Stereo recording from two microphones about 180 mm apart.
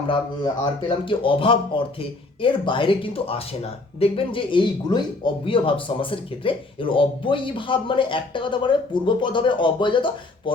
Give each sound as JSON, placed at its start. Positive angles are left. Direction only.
{"t": 0.1, "sound": "speech", "side_deg": 25}